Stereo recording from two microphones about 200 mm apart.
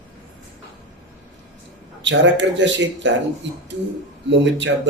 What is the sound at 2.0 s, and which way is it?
Speech, 65° right (ahead or behind).